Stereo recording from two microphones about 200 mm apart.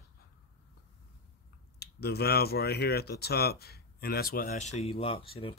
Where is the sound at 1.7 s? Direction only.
55° left (ahead or behind).